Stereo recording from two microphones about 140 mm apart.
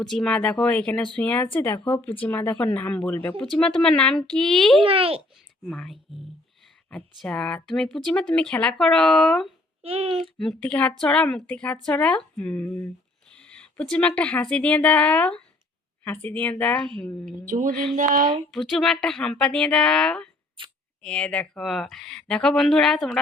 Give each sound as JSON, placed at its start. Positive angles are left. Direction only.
{"t": 0.0, "sound": "speech", "side_deg": 5}
{"t": 4.8, "sound": "a child's voice", "side_deg": -40}
{"t": 5.6, "sound": "speech", "side_deg": 0}
{"t": 9.8, "sound": "a child's voice", "side_deg": -45}
{"t": 10.2, "sound": "speech", "side_deg": 0}
{"t": 13.3, "sound": "a sound", "side_deg": 5}
{"t": 14.2, "sound": "speech", "side_deg": 10}
{"t": 17.2, "sound": "a woman's voice", "side_deg": -70}
{"t": 18.5, "sound": "speech", "side_deg": 0}
{"t": 20.6, "sound": "speech", "side_deg": -35}
{"t": 21.0, "sound": "speech", "side_deg": 10}